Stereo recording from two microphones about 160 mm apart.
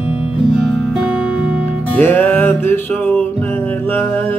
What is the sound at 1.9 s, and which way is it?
Music, 10° left (ahead or behind).